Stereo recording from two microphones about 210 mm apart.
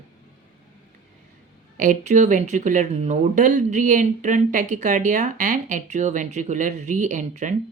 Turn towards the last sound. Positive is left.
turn(degrees=-35)  # may be behind; listen again after turning